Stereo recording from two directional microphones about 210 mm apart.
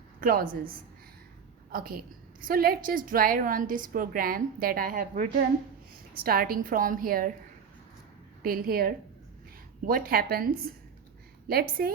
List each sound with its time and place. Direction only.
0.2 s a woman's voice: 45° right (ahead or behind)
1.7 s a woman's voice: 45° right (ahead or behind)
8.4 s a woman's voice: 45° right (ahead or behind)